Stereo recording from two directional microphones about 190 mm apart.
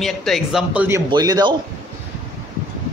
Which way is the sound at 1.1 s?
20° right (ahead or behind).